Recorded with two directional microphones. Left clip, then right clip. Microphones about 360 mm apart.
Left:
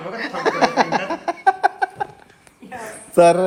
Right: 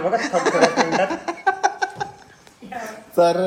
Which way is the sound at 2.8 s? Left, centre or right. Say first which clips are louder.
Left 4 dB; left.